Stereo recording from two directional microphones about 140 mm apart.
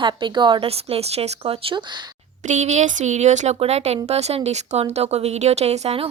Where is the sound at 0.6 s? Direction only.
45° right (ahead or behind).